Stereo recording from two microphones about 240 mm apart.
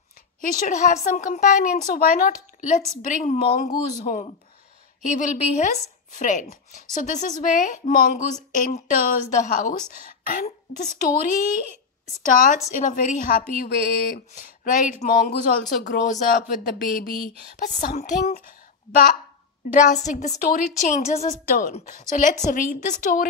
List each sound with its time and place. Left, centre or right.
0.4 s speech: left
19.7 s speech: left